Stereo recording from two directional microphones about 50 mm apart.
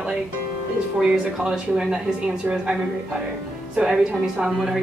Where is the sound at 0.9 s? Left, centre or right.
Centre.